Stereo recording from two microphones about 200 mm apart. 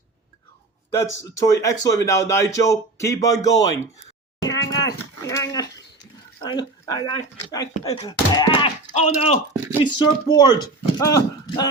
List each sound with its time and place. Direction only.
0.9 s a man's voice: 15° left (ahead or behind)
4.4 s dog: 15° left (ahead or behind)
6.4 s speech: 20° left (ahead or behind)